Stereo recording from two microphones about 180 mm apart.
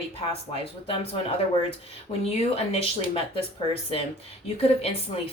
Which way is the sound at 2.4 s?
35° left (ahead or behind).